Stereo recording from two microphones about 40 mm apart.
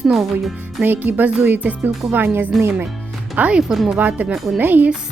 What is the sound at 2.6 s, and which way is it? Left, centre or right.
Speech, right.